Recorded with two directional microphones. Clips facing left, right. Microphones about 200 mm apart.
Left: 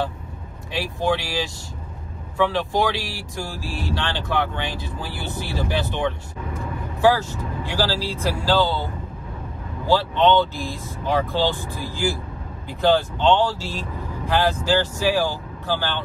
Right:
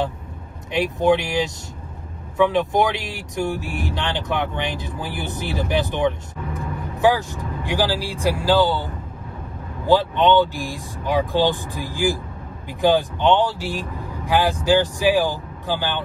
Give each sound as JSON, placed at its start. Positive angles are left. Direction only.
{"t": 0.7, "sound": "speech", "side_deg": -20}
{"t": 9.8, "sound": "speech", "side_deg": -15}